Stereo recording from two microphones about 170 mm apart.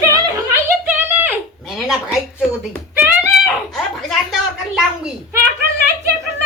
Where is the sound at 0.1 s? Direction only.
20° right (ahead or behind).